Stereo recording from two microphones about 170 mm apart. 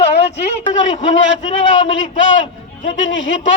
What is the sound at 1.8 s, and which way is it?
A man's voice, 90° left.